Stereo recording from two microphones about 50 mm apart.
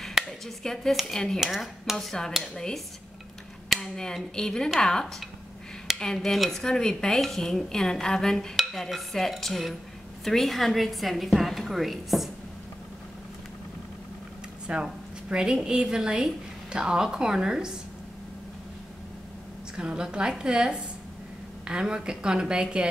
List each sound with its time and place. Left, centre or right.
0.6 s a woman's voice: centre
1.4 s a woman's voice: centre
2.0 s a woman's voice: centre
6.1 s a woman's voice: centre
6.6 s a woman's voice: centre
14.7 s a woman's voice: right
19.8 s a woman's voice: centre